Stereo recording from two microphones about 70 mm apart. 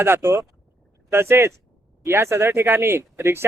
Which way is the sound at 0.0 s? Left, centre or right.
Right.